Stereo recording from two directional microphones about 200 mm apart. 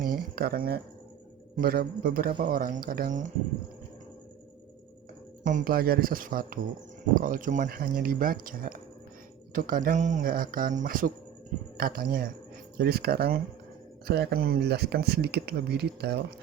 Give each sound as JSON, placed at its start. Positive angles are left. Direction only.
{"t": 0.3, "sound": "speech", "side_deg": -50}
{"t": 5.4, "sound": "speech", "side_deg": -40}